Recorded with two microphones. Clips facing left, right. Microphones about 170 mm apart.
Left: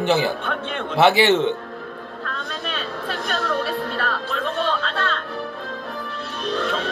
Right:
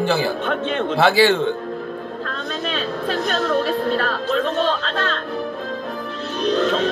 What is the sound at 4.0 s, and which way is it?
Music, 35° right (ahead or behind).